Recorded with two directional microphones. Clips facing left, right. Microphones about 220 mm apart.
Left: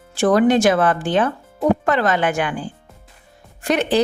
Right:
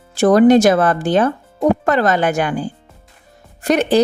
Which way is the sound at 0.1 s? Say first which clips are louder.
Right 5 dB; 40° right (ahead or behind).